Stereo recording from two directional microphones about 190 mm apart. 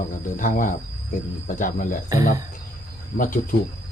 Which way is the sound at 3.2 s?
45° left (ahead or behind).